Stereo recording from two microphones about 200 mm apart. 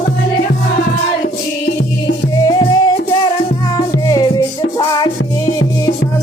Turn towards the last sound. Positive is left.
turn(degrees=20)  # may be behind; listen again after turning